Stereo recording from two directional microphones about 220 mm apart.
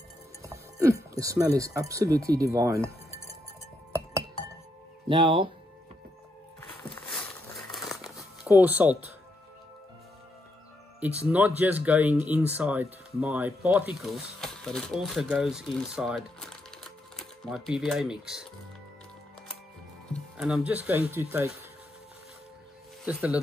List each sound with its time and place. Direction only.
0.4 s speech: 15° right (ahead or behind)
5.0 s speech: 25° right (ahead or behind)
7.0 s crumpling: 5° left (ahead or behind)
8.6 s speech: 10° right (ahead or behind)
11.2 s speech: 5° right (ahead or behind)
20.1 s speech: centre (ahead or behind)
23.0 s speech: 5° right (ahead or behind)